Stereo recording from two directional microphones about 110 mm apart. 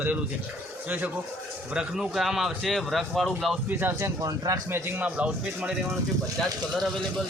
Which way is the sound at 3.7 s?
20° right (ahead or behind).